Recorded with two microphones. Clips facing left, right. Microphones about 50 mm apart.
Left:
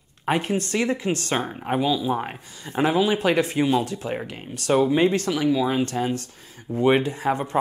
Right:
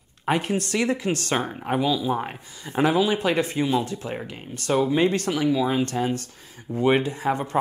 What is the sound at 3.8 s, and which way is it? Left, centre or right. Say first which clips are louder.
Speech: left 1 dB; left.